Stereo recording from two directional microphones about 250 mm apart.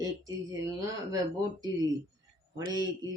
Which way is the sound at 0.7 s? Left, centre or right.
Centre.